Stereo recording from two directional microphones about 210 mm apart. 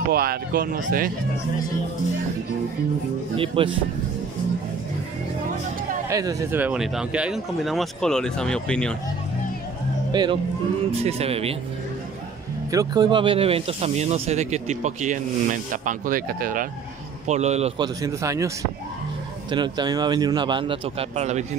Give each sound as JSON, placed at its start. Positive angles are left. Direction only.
{"t": 0.1, "sound": "speech", "side_deg": -45}
{"t": 3.3, "sound": "a man's voice", "side_deg": -25}
{"t": 6.0, "sound": "speech", "side_deg": -15}
{"t": 10.1, "sound": "a man's voice", "side_deg": -20}
{"t": 12.7, "sound": "speech", "side_deg": -20}
{"t": 17.3, "sound": "a man's voice", "side_deg": -30}
{"t": 19.5, "sound": "a man's voice", "side_deg": -20}